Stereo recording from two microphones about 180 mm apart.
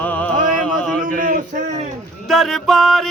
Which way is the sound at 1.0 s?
50° right (ahead or behind).